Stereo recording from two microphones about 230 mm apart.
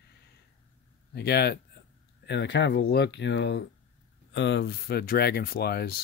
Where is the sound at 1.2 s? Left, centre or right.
Left.